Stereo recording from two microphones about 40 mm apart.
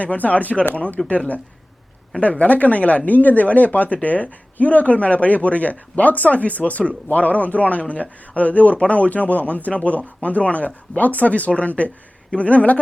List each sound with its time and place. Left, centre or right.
0.0 s speech: left
2.4 s speech: left